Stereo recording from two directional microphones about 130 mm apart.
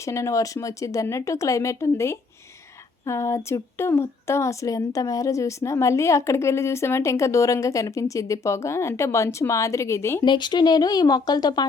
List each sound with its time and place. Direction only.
0.0 s speech: 25° left (ahead or behind)
10.2 s speech: 35° left (ahead or behind)